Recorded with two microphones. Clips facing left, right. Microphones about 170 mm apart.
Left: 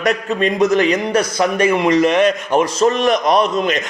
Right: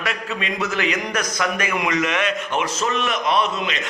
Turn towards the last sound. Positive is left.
turn(degrees=40)  # may be behind; listen again after turning